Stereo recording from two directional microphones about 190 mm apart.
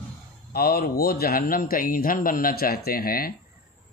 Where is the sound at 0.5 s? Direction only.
55° left (ahead or behind).